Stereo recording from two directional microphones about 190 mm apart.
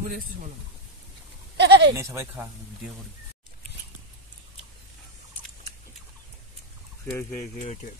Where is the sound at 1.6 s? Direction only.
65° right (ahead or behind).